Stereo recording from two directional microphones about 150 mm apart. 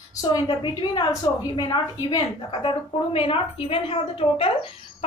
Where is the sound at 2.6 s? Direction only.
35° left (ahead or behind).